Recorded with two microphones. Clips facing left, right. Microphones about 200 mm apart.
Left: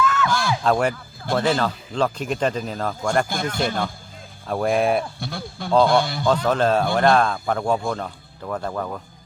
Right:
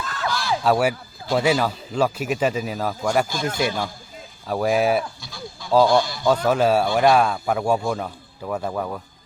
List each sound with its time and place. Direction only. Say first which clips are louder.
0.0 s a sound: left 9 dB; 35° right (ahead or behind)
0.3 s speech: left 3 dB; 50° left (ahead or behind)
0.6 s a man's voice: right 3 dB; 5° right (ahead or behind)
3.6 s a man's voice: even; 55° left (ahead or behind)
4.4 s speech: even; 5° right (ahead or behind)
5.2 s speech: left 6 dB; 60° left (ahead or behind)
6.2 s a man's voice: right 1 dB; 10° right (ahead or behind)